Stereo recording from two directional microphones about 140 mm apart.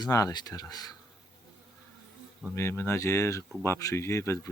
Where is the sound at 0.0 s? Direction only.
25° left (ahead or behind).